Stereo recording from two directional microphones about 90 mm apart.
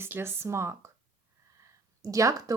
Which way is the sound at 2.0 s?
35° right (ahead or behind).